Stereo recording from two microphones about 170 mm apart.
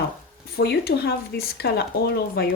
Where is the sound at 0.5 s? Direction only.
75° left (ahead or behind).